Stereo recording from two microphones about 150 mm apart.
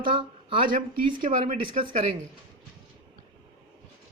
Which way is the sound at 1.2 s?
60° right (ahead or behind).